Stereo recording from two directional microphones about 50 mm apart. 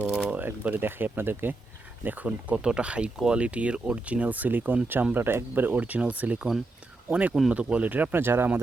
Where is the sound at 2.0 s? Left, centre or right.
Right.